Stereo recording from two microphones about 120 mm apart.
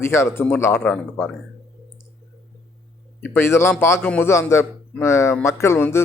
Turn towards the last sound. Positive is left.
turn(degrees=20)  # may be behind; listen again after turning